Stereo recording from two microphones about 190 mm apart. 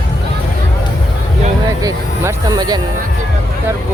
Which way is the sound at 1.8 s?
15° right (ahead or behind).